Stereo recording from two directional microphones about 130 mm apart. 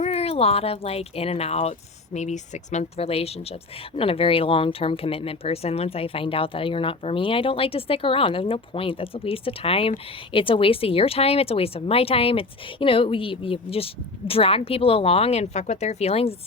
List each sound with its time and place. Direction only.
0.0 s speech: 55° left (ahead or behind)
2.1 s speech: 65° left (ahead or behind)